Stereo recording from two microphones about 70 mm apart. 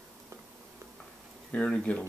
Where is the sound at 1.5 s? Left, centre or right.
Centre.